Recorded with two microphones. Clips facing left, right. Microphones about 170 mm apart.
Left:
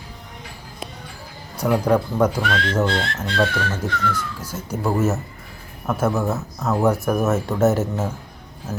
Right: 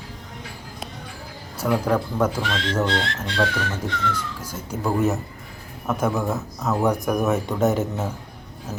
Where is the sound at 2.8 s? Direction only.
20° right (ahead or behind).